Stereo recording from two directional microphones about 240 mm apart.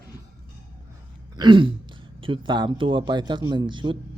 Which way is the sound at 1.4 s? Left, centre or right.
Centre.